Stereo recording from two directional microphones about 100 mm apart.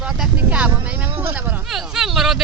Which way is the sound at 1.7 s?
5° right (ahead or behind).